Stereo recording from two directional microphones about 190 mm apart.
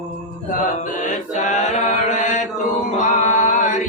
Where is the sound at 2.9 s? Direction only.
40° left (ahead or behind).